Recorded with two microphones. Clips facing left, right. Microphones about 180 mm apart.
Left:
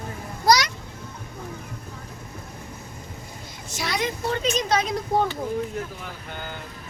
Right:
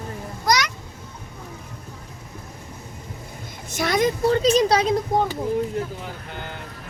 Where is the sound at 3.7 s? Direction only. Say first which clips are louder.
Right 7 dB; 50° right (ahead or behind); by 4.9 s 35° right (ahead or behind).